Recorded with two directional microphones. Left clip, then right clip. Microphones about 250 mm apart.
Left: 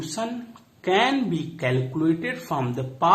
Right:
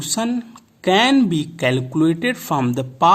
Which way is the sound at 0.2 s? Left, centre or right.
Right.